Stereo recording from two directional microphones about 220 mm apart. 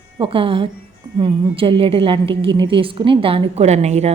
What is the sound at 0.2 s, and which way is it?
A woman's voice, 25° right (ahead or behind).